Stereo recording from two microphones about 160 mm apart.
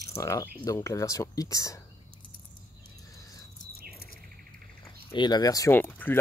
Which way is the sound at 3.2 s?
20° left (ahead or behind).